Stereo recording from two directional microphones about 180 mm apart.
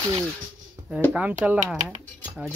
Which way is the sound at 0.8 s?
15° right (ahead or behind).